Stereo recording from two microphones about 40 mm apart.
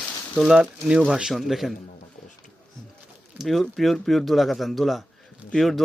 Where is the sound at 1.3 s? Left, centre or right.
Centre.